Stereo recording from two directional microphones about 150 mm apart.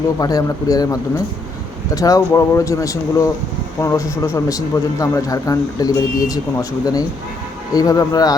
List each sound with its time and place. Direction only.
0.2 s a man's voice: 25° left (ahead or behind)
2.0 s a man's voice: 25° left (ahead or behind)